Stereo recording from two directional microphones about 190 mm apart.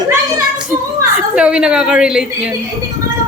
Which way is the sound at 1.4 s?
5° right (ahead or behind).